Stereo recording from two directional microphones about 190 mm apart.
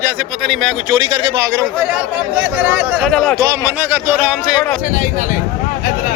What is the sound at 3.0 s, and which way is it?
Speech, 5° left (ahead or behind).